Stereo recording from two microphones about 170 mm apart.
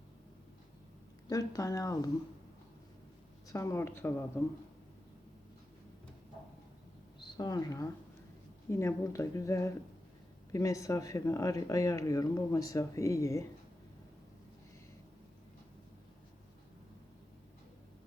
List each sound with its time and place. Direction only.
1.3 s speech: 20° left (ahead or behind)
3.5 s a woman's voice: 15° left (ahead or behind)
7.2 s a woman's voice: 25° left (ahead or behind)